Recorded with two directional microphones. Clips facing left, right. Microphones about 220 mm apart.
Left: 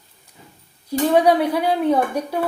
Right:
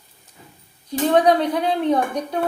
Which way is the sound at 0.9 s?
10° left (ahead or behind).